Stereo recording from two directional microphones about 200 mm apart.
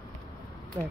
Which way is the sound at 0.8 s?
20° right (ahead or behind).